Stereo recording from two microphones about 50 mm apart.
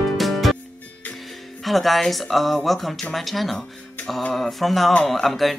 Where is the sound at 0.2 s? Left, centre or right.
Centre.